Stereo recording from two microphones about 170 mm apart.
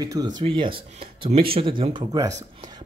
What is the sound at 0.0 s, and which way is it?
A man's voice, 25° right (ahead or behind).